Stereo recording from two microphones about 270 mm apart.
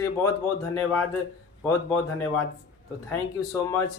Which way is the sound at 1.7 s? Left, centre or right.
Centre.